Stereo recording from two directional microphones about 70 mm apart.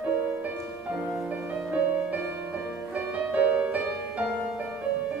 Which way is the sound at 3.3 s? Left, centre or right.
Right.